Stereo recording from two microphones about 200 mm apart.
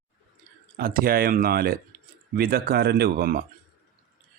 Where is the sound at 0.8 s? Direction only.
45° right (ahead or behind).